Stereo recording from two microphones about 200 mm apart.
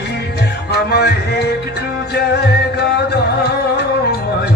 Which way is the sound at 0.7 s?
55° left (ahead or behind).